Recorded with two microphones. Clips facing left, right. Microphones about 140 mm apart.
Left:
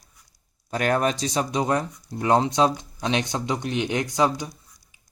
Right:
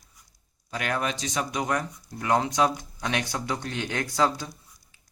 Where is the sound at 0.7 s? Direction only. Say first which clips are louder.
Left 6 dB; 40° left (ahead or behind).